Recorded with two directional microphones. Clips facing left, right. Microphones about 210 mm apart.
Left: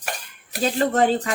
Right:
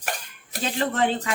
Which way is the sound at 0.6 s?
40° left (ahead or behind).